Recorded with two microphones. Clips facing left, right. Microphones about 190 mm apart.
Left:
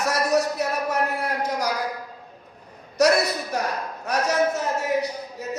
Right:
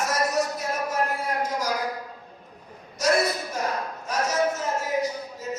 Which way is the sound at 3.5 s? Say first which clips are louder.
Left 2 dB; 65° left (ahead or behind).